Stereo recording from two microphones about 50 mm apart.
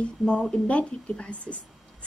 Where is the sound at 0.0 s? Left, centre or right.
Centre.